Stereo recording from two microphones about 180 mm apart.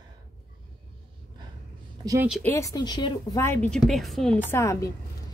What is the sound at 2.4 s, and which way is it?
A woman's voice, 15° left (ahead or behind).